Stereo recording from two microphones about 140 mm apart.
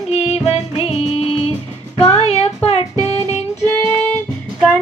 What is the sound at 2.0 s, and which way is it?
Music, 45° left (ahead or behind).